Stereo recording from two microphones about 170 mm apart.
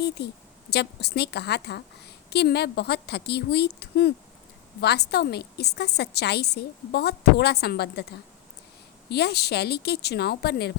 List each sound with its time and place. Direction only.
0.2 s a woman's voice: 75° left (ahead or behind)
9.0 s a woman's voice: 75° left (ahead or behind)